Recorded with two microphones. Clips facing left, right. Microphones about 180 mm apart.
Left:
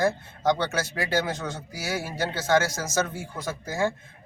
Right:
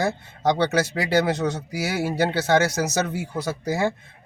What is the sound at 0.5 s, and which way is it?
A man's voice, 75° right (ahead or behind).